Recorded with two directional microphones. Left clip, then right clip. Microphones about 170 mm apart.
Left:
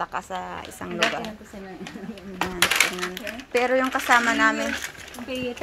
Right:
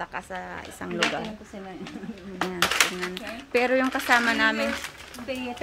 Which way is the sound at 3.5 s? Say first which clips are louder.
Left 1 dB; 30° right (ahead or behind).